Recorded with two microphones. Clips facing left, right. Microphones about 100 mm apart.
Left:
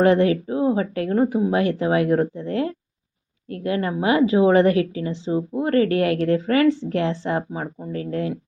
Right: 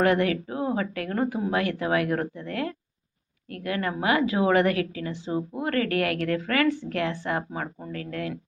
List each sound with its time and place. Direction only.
0.0 s a woman's voice: 25° left (ahead or behind)